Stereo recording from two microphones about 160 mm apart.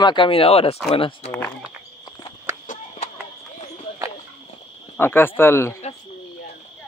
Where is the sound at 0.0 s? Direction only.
30° left (ahead or behind).